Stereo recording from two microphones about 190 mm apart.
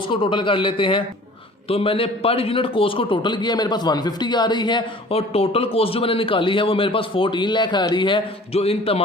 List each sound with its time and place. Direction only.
0.1 s a man's voice: 25° left (ahead or behind)